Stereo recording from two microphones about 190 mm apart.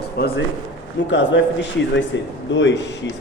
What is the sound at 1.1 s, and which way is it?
A man's voice, 75° left (ahead or behind).